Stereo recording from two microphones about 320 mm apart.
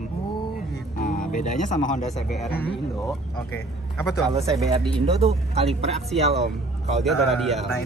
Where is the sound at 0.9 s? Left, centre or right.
Left.